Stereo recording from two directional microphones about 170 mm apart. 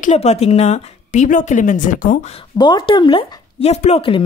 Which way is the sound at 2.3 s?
25° left (ahead or behind).